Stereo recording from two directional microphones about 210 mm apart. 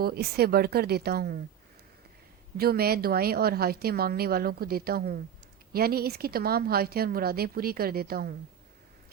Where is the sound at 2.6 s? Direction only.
45° right (ahead or behind).